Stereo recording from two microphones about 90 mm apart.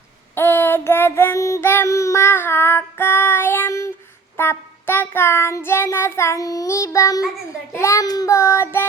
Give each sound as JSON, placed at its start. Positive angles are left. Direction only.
{"t": 0.3, "sound": "child singing", "side_deg": 25}
{"t": 8.0, "sound": "child singing", "side_deg": 45}